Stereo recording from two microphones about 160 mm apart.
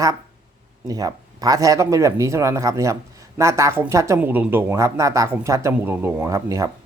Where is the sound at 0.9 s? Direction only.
20° right (ahead or behind).